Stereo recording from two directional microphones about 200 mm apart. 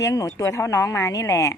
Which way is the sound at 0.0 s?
15° left (ahead or behind).